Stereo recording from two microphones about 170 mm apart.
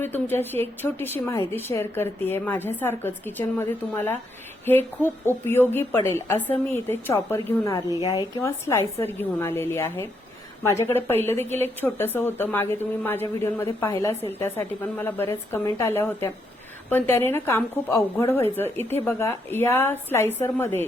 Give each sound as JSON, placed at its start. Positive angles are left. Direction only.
{"t": 0.0, "sound": "a woman's voice", "side_deg": 15}